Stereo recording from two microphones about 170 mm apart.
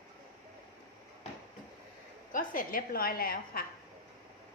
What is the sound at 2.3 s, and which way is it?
A woman's voice, 55° left (ahead or behind).